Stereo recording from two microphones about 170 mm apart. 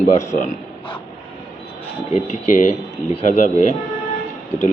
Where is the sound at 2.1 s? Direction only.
45° left (ahead or behind).